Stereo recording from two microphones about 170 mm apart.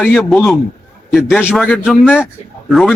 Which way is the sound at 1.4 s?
Centre (ahead or behind).